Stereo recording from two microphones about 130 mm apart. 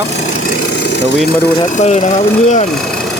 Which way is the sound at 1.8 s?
60° left (ahead or behind).